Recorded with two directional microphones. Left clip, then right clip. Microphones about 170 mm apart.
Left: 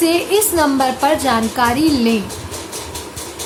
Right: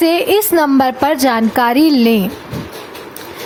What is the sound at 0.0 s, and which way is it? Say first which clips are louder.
A woman's voice: right 3 dB; 55° right (ahead or behind).